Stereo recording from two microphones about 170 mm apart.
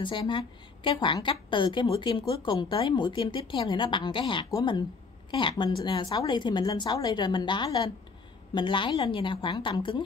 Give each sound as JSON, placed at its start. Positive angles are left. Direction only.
{"t": 0.0, "sound": "a woman's voice", "side_deg": 30}